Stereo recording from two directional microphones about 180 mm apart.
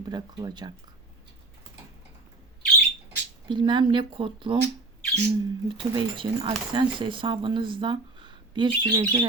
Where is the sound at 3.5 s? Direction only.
25° right (ahead or behind).